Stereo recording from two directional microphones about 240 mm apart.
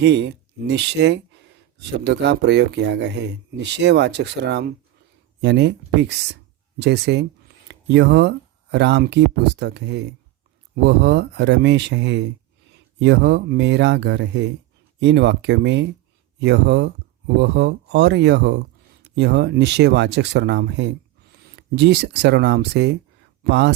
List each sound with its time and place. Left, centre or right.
0.0 s speech: right